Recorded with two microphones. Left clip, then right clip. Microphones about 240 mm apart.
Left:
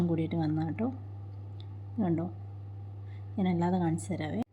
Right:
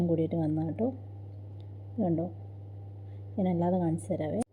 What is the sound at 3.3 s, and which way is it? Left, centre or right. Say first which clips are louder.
A woman's voice: right 2 dB; centre.